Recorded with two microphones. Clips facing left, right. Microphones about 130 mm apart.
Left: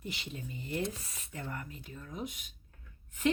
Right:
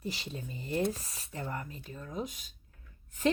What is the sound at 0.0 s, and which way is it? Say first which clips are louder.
A woman's voice: right 3 dB; 35° right (ahead or behind).